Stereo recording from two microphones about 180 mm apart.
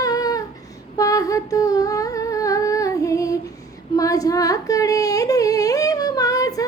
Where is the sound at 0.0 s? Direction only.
20° left (ahead or behind).